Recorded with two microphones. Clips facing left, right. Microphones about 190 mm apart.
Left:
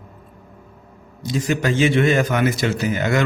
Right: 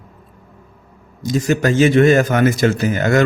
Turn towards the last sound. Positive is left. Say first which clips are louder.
# right 4 dB
turn(degrees=-45)  # may be behind; listen again after turning